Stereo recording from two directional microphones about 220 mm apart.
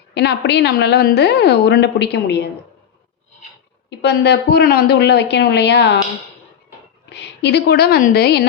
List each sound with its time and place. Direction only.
0.1 s a woman's voice: 50° left (ahead or behind)
3.8 s a woman's voice: 50° left (ahead or behind)
7.1 s a woman's voice: 50° left (ahead or behind)